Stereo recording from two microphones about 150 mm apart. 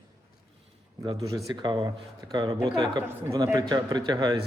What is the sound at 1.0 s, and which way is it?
A man's voice, 25° right (ahead or behind).